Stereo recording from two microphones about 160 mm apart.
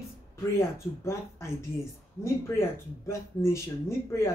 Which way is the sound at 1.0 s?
15° left (ahead or behind).